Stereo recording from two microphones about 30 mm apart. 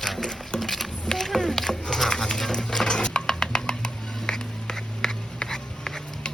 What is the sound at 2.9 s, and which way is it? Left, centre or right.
Patter, left.